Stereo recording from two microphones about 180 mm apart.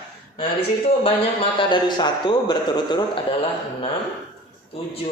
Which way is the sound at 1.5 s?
25° left (ahead or behind).